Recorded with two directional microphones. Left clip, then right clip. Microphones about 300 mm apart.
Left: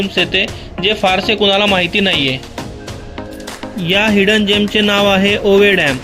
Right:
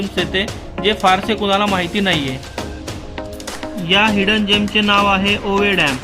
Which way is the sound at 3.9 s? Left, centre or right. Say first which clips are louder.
Left 2 dB; centre.